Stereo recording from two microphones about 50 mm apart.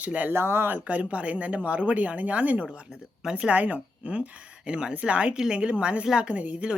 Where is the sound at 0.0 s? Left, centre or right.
Right.